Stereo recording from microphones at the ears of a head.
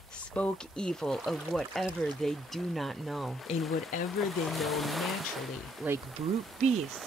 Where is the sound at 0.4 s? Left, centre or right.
Centre.